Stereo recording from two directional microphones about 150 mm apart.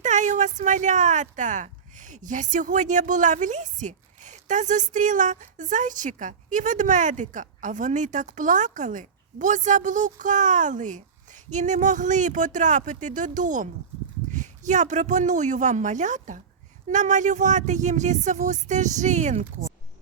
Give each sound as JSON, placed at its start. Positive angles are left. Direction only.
{"t": 0.0, "sound": "speech", "side_deg": -55}